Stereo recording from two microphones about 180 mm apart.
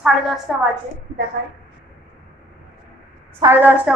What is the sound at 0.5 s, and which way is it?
Speech, 5° right (ahead or behind).